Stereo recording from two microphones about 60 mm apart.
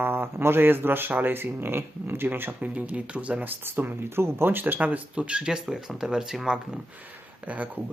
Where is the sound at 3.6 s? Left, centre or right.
Right; by 6.6 s centre.